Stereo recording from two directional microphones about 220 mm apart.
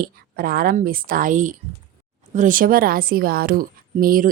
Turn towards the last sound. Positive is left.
turn(degrees=-40)  # may be behind; listen again after turning